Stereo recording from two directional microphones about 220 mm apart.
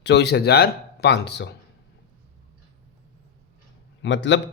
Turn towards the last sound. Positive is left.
turn(degrees=55)  # may be behind; listen again after turning